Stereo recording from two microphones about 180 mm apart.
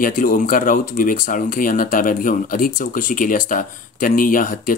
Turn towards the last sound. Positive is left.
turn(degrees=50)  # may be behind; listen again after turning